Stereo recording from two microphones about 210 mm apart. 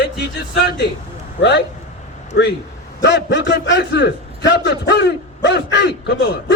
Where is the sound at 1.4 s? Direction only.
50° left (ahead or behind).